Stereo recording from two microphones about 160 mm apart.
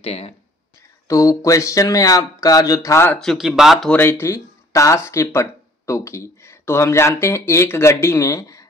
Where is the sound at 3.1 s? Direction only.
Centre (ahead or behind).